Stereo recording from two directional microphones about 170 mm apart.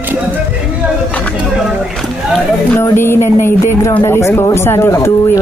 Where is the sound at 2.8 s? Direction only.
15° left (ahead or behind).